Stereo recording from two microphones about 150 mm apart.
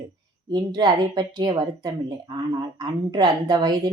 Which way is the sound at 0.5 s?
30° right (ahead or behind).